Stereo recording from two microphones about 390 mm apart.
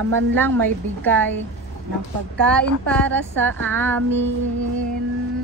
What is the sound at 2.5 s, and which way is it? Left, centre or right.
Speech, centre.